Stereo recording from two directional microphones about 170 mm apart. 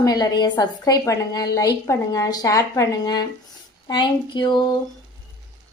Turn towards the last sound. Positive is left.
turn(degrees=25)  # may be behind; listen again after turning